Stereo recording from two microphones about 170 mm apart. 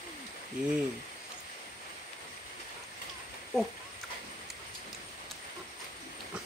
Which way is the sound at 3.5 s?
Centre (ahead or behind).